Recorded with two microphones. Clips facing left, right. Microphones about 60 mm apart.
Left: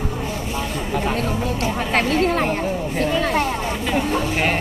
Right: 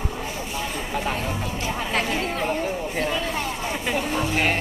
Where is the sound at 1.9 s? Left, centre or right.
Left.